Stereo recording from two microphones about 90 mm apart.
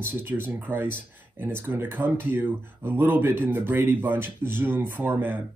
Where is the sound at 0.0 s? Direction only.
25° right (ahead or behind).